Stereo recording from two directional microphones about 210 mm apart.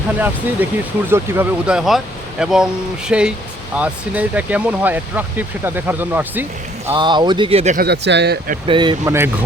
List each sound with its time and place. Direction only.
0.2 s speech: 10° right (ahead or behind)
6.9 s speech: 20° right (ahead or behind)
7.8 s speech: 55° right (ahead or behind)
8.6 s speech: 20° right (ahead or behind)